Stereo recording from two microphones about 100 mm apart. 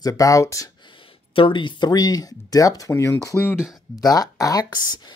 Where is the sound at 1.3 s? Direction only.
60° left (ahead or behind); by 2.9 s 35° left (ahead or behind).